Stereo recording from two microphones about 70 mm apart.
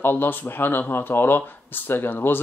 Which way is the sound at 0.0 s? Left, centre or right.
Left.